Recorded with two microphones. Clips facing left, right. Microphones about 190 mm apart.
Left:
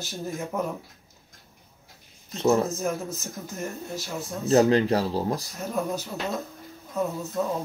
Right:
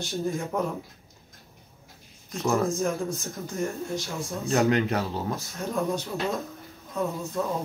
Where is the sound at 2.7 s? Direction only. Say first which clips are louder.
Right 2 dB; 5° left (ahead or behind).